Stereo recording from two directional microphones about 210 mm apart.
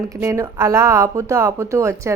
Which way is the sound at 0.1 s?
15° right (ahead or behind).